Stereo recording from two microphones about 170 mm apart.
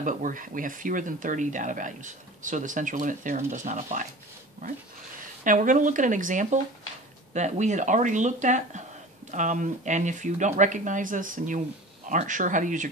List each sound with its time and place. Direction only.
0.0 s speech: 50° right (ahead or behind)
5.4 s speech: 50° right (ahead or behind)